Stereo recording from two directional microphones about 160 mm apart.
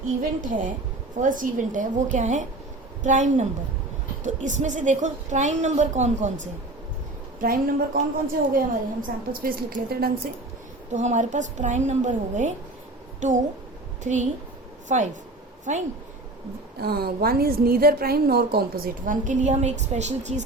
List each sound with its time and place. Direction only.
0.2 s a woman's voice: 55° right (ahead or behind)
7.3 s a woman's voice: 60° right (ahead or behind)
10.9 s a woman's voice: 50° right (ahead or behind)
16.8 s a woman's voice: 75° right (ahead or behind)
19.0 s a woman's voice: 50° right (ahead or behind)